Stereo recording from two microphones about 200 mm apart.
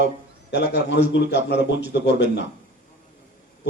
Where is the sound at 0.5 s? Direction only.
60° left (ahead or behind).